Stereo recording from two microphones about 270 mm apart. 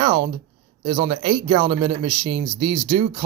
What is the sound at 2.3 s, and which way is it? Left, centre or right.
Speech, right.